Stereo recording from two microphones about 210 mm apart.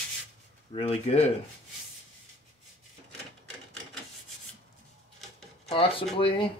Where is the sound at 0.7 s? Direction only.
30° left (ahead or behind).